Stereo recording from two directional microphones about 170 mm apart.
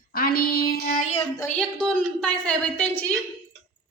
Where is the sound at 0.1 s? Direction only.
60° left (ahead or behind).